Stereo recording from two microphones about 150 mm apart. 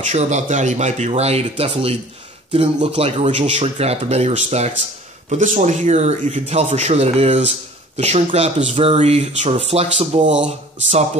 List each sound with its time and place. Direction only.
0.1 s speech: 50° right (ahead or behind)